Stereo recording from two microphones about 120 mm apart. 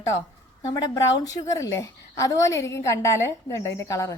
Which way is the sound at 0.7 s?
30° left (ahead or behind).